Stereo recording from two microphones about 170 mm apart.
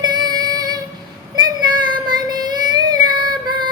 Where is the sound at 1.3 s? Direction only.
25° right (ahead or behind).